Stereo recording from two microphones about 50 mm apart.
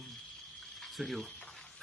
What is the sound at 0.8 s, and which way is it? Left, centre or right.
Speech, centre.